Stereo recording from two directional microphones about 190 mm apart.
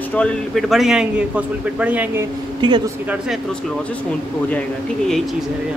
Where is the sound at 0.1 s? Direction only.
5° left (ahead or behind).